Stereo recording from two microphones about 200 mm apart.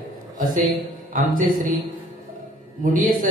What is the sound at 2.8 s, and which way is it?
Speech, 45° right (ahead or behind).